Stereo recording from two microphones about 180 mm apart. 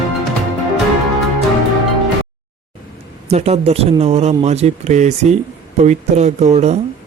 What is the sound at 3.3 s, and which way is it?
Speech, 35° right (ahead or behind).